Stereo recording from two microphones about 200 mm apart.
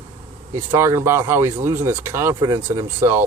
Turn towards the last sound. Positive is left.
turn(degrees=-10)  # may be behind; listen again after turning